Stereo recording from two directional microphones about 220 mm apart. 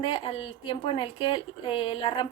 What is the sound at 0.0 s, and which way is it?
Speech, 25° left (ahead or behind).